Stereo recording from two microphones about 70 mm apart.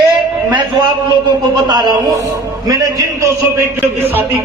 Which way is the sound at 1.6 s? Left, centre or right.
Right.